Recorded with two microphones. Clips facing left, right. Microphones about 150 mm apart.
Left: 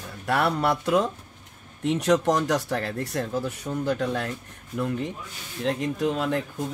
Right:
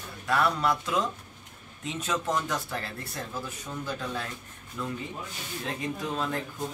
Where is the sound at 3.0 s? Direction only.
70° left (ahead or behind).